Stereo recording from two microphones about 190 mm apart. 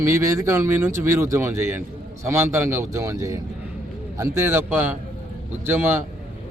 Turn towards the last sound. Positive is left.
turn(degrees=-10)  # may be behind; listen again after turning